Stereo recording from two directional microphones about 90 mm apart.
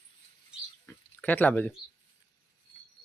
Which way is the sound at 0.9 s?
20° left (ahead or behind).